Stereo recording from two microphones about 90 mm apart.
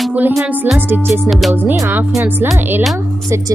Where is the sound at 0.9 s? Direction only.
20° right (ahead or behind).